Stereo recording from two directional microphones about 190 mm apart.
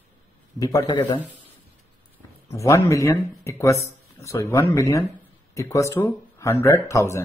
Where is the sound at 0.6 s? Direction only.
20° left (ahead or behind).